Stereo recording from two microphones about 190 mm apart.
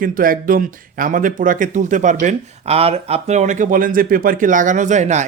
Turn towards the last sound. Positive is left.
turn(degrees=-40)  # may be behind; listen again after turning